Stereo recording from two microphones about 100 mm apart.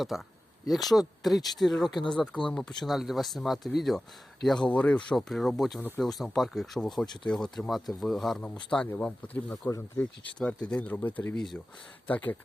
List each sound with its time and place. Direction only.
0.0 s speech: centre (ahead or behind)
2.8 s speech: centre (ahead or behind)
9.6 s speech: 35° left (ahead or behind)
10.0 s speech: 10° left (ahead or behind)
11.3 s speech: 5° left (ahead or behind)
12.0 s speech: 15° left (ahead or behind)